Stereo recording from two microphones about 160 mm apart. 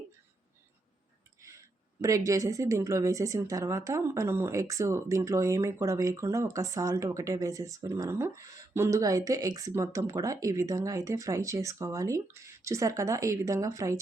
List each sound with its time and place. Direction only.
1.4 s speech: 20° right (ahead or behind)